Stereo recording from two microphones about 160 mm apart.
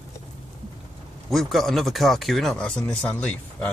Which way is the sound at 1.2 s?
Centre (ahead or behind).